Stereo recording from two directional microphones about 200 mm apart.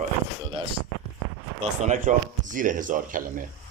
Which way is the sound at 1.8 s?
40° right (ahead or behind).